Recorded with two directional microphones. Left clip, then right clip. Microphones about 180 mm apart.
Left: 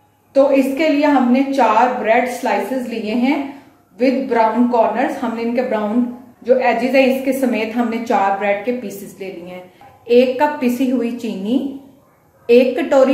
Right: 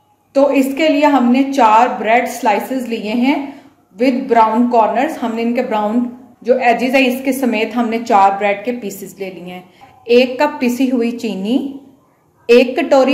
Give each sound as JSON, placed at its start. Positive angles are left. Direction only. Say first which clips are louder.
{"t": 0.3, "sound": "a woman's voice", "louder": "even", "side_deg": -60}